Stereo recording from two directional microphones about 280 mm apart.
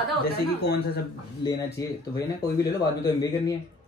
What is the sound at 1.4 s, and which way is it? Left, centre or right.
Speech, centre.